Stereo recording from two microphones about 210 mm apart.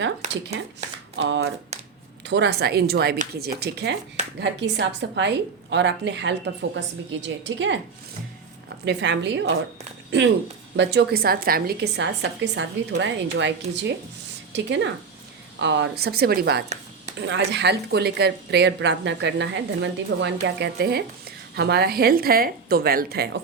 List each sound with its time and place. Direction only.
1.2 s a woman's voice: 55° right (ahead or behind)
8.8 s a woman's voice: 55° right (ahead or behind)
14.5 s a woman's voice: 60° right (ahead or behind)